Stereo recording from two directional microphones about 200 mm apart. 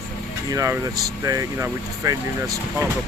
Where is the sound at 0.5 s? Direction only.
15° right (ahead or behind).